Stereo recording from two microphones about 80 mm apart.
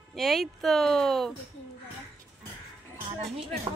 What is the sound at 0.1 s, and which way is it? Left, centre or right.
Speech, centre.